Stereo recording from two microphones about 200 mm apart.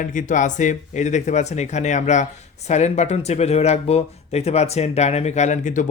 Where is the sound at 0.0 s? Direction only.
40° left (ahead or behind).